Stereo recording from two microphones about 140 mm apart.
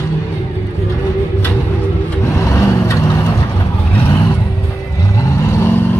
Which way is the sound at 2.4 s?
20° left (ahead or behind).